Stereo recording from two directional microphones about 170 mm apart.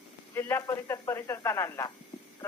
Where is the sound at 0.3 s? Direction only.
15° left (ahead or behind).